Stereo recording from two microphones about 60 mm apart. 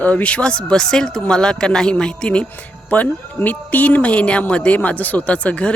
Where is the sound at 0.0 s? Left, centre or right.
Left.